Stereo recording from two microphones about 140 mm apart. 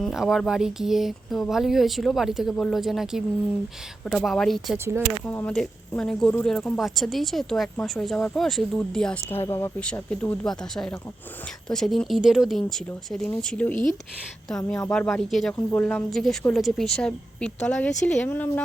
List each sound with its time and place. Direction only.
0.0 s speech: centre (ahead or behind)
5.2 s speech: 10° left (ahead or behind)
9.3 s speech: 20° left (ahead or behind)
9.8 s speech: 10° left (ahead or behind)
14.9 s speech: 5° left (ahead or behind)
15.5 s speech: 15° left (ahead or behind)